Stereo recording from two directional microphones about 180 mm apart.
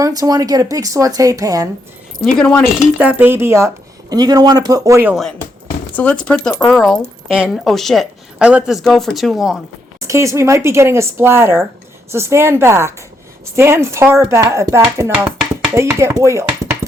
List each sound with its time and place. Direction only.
0.0 s speech: 20° right (ahead or behind)
2.4 s a woman's voice: 5° left (ahead or behind)
3.0 s speech: 10° right (ahead or behind)
6.0 s a woman's voice: 5° left (ahead or behind)
10.0 s speech: 15° right (ahead or behind)